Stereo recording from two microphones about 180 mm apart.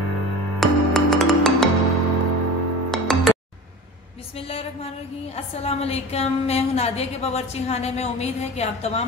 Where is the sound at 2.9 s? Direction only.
Centre (ahead or behind).